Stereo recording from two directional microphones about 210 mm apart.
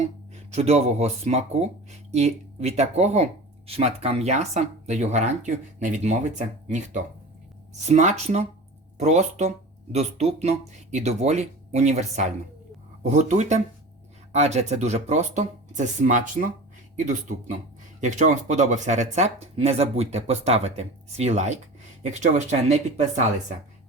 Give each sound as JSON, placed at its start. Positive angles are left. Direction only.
{"t": 0.3, "sound": "speech", "side_deg": -30}
{"t": 18.0, "sound": "speech", "side_deg": -35}